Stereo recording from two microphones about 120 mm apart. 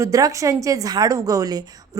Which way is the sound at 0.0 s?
30° right (ahead or behind).